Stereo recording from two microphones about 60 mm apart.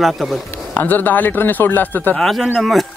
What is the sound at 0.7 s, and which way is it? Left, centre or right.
Speech, left.